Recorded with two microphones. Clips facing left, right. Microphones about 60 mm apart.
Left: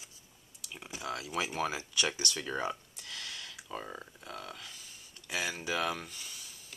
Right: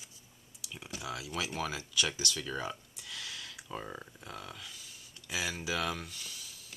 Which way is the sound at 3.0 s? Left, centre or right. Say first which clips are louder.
Even; centre.